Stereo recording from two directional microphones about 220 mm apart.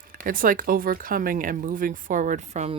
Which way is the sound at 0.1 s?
40° right (ahead or behind).